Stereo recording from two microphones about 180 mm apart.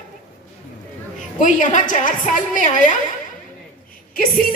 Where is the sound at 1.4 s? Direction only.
45° left (ahead or behind).